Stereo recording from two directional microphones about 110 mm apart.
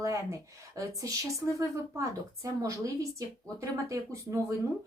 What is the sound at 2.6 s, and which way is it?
Speech, 30° right (ahead or behind).